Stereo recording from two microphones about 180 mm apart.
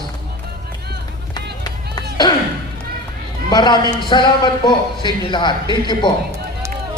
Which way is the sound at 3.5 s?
25° left (ahead or behind).